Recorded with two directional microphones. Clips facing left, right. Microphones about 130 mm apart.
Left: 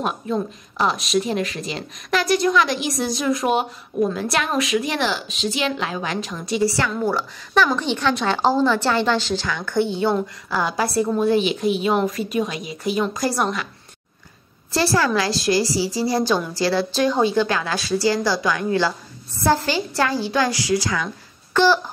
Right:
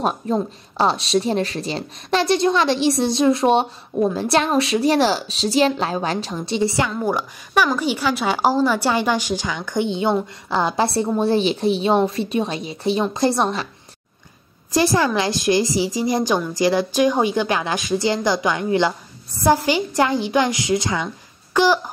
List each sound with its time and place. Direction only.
0.0 s a woman's voice: 35° right (ahead or behind)
14.7 s speech: 15° right (ahead or behind)
21.5 s a woman's voice: 15° right (ahead or behind)